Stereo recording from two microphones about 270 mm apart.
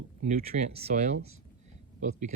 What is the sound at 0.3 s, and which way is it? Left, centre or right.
Speech, right.